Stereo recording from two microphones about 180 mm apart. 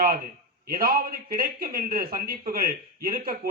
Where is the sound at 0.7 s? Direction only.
55° right (ahead or behind).